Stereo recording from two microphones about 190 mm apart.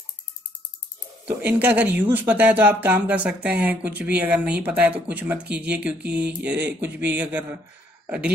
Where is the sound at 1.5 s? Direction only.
10° right (ahead or behind).